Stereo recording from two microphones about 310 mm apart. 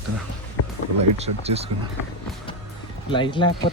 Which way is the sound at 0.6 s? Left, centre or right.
Left.